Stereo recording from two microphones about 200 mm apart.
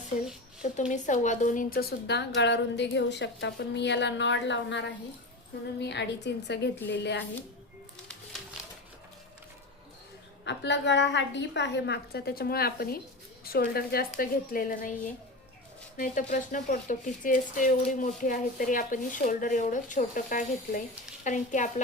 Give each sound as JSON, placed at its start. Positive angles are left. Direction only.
{"t": 0.8, "sound": "a woman's voice", "side_deg": 40}
{"t": 10.4, "sound": "a woman's voice", "side_deg": 60}
{"t": 16.0, "sound": "speech", "side_deg": 40}